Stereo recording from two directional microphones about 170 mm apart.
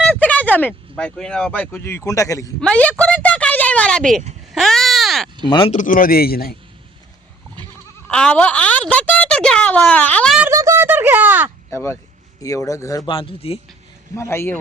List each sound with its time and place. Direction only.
0.1 s a sound: 10° left (ahead or behind)
0.9 s a man's voice: 5° left (ahead or behind)
2.6 s a man's voice: 5° left (ahead or behind)
3.0 s a sound: 5° left (ahead or behind)
5.5 s speech: 30° left (ahead or behind)
5.7 s a man's voice: 50° left (ahead or behind)
8.1 s a woman's voice: 10° left (ahead or behind)
10.4 s a sound: 20° right (ahead or behind)
11.7 s a man's voice: 15° left (ahead or behind); by 13.6 s 35° left (ahead or behind)
14.2 s a man's voice: 15° left (ahead or behind)